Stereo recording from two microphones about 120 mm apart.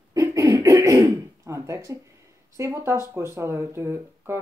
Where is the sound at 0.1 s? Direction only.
25° right (ahead or behind).